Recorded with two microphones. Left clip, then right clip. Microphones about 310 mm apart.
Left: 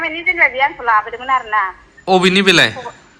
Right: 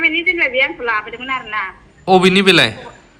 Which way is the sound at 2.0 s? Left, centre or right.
Centre.